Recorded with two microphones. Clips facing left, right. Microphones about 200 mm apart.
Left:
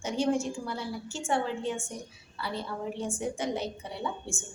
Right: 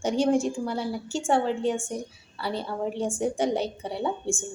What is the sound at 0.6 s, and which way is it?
A woman's voice, 30° right (ahead or behind).